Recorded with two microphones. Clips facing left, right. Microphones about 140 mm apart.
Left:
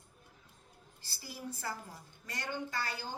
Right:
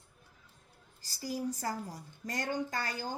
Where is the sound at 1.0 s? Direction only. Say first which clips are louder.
Right 9 dB; 40° right (ahead or behind).